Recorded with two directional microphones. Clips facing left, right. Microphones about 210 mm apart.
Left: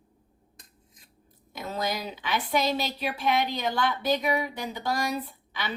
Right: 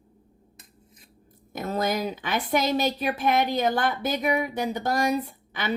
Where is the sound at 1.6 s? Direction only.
45° right (ahead or behind).